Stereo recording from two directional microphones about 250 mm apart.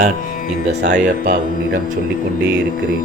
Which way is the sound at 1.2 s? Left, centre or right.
Right.